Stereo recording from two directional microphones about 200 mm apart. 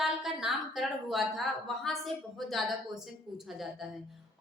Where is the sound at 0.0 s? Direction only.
Centre (ahead or behind).